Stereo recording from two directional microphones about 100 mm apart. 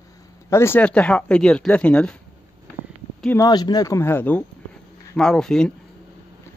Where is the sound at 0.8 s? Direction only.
10° left (ahead or behind).